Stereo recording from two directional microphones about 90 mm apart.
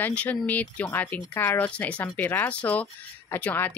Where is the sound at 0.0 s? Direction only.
15° left (ahead or behind).